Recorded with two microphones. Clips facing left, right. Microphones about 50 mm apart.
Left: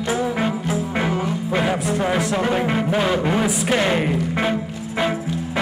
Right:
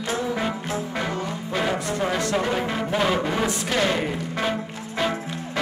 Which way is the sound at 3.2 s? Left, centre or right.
Centre.